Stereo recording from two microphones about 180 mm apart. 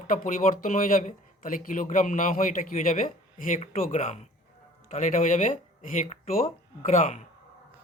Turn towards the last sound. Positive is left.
turn(degrees=40)  # may be behind; listen again after turning